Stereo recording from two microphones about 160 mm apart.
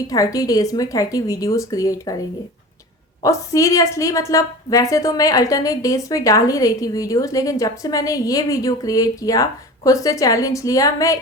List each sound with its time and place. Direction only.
0.1 s a woman's voice: 20° left (ahead or behind)
3.2 s a woman's voice: 20° left (ahead or behind)